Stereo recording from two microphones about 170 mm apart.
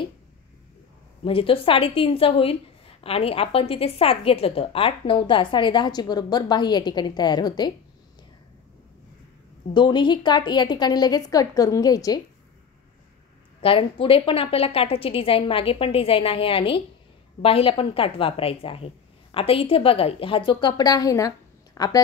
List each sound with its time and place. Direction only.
1.2 s a woman's voice: 30° left (ahead or behind)
9.8 s a woman's voice: 25° left (ahead or behind)
13.6 s a woman's voice: 30° left (ahead or behind)